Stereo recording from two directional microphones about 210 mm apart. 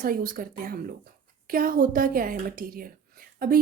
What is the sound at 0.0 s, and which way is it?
A woman's voice, 40° right (ahead or behind).